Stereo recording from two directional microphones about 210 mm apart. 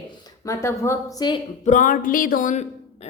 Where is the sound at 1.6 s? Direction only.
40° left (ahead or behind).